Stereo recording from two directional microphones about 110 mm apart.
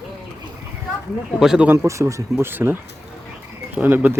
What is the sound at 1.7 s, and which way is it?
Speech, 25° right (ahead or behind).